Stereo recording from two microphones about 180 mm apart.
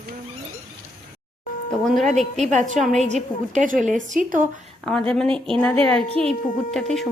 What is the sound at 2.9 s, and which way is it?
A woman's voice, 40° right (ahead or behind).